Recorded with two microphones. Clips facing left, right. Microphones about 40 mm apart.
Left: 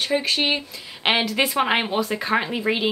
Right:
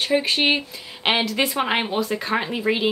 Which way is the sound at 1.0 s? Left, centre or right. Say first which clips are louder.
Even; centre.